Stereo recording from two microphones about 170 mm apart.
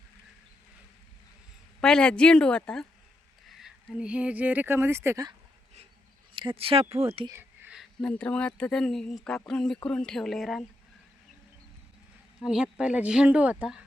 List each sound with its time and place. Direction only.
1.8 s speech: 5° left (ahead or behind); by 5.3 s 20° right (ahead or behind)
6.3 s speech: 30° right (ahead or behind)
7.3 s a sound: 15° right (ahead or behind)
7.8 s speech: 5° left (ahead or behind)
12.4 s speech: 5° right (ahead or behind)